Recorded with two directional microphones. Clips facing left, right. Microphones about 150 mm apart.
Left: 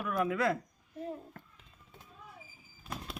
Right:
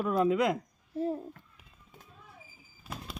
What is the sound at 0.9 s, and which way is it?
Speech, 35° right (ahead or behind).